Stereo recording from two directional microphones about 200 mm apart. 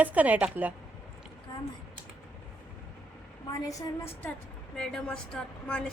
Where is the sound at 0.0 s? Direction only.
10° right (ahead or behind).